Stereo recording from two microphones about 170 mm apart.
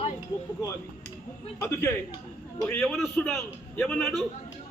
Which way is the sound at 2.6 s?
5° left (ahead or behind).